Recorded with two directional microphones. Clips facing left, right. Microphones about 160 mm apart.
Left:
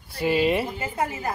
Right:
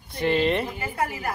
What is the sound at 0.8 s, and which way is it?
Speech, 25° left (ahead or behind).